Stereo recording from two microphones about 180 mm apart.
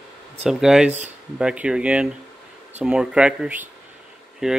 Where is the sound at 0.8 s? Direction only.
40° right (ahead or behind).